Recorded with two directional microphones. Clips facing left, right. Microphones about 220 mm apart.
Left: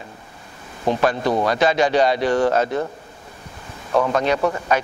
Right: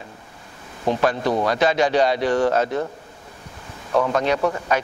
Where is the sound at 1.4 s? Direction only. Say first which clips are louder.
Left 1 dB; 10° left (ahead or behind).